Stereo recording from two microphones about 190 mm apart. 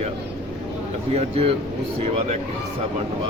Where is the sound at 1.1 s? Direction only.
35° right (ahead or behind).